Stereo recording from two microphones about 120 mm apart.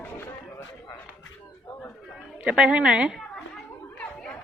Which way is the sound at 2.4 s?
10° right (ahead or behind).